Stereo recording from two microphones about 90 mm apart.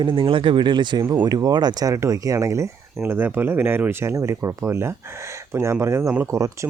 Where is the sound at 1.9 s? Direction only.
35° right (ahead or behind).